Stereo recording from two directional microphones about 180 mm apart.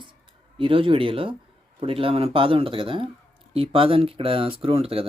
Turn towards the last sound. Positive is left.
turn(degrees=-35)  # may be behind; listen again after turning